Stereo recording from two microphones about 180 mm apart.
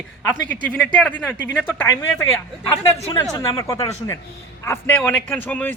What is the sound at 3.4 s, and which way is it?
A woman's voice, 15° left (ahead or behind).